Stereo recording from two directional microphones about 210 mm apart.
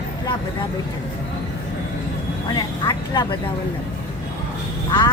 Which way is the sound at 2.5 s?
20° left (ahead or behind).